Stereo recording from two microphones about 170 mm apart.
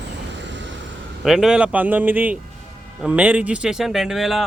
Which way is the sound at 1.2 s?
Centre (ahead or behind).